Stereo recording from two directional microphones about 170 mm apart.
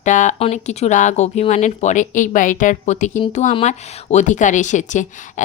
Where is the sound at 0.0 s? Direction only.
45° left (ahead or behind).